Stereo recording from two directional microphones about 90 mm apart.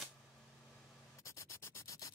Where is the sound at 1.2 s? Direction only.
35° left (ahead or behind).